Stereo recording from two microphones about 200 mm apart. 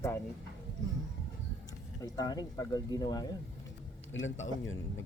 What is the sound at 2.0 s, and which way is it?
Speech, 20° left (ahead or behind).